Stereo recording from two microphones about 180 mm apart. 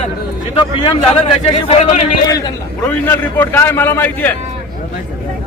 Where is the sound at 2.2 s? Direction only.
20° left (ahead or behind).